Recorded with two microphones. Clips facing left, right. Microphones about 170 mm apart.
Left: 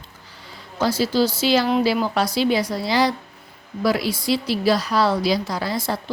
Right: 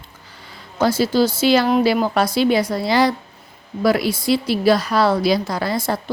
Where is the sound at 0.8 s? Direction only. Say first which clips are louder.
Right 3 dB; 55° right (ahead or behind).